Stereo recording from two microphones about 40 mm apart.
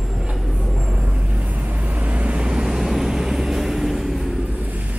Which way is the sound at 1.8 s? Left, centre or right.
Right.